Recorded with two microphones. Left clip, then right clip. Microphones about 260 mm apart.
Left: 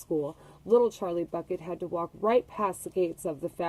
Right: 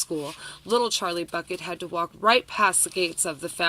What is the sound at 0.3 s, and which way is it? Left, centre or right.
Speech, right.